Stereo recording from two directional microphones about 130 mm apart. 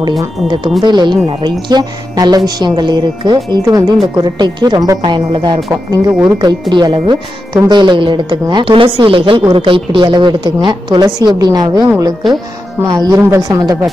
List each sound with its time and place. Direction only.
0.7 s speech: 35° right (ahead or behind)
12.8 s speech: 30° right (ahead or behind)